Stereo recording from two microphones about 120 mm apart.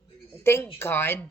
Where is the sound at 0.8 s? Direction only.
20° left (ahead or behind).